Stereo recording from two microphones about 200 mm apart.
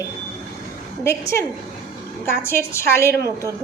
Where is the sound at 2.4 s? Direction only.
15° left (ahead or behind).